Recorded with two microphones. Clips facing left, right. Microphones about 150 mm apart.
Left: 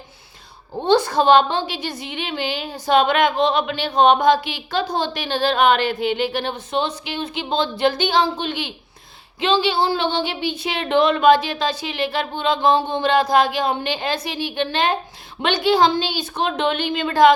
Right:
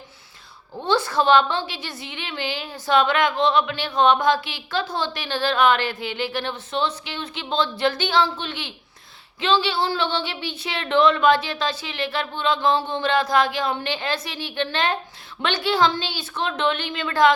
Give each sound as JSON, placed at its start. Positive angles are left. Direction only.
{"t": 0.9, "sound": "speech", "side_deg": 20}